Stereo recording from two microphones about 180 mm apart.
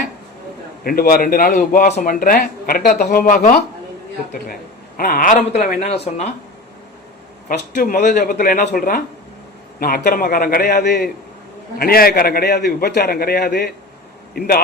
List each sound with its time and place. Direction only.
0.9 s a man's voice: 55° left (ahead or behind)
4.9 s speech: 55° left (ahead or behind); by 6.3 s 35° left (ahead or behind)
7.4 s a man's voice: 50° left (ahead or behind)